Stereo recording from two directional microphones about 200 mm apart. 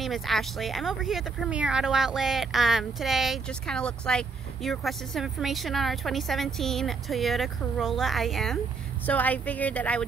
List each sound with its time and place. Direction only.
0.0 s a woman's voice: centre (ahead or behind)